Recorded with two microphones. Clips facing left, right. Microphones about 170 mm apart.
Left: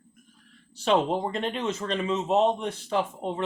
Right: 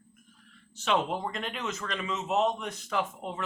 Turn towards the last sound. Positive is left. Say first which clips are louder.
# left 5 dB
turn(degrees=30)  # may be behind; listen again after turning